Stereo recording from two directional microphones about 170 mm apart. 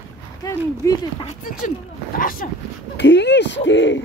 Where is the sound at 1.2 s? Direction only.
45° left (ahead or behind).